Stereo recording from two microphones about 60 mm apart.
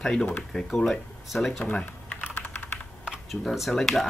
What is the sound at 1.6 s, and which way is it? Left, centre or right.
Speech, left.